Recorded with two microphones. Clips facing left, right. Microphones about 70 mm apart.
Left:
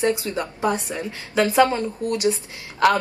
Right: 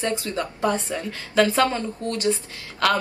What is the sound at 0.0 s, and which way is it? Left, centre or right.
A woman's voice, left.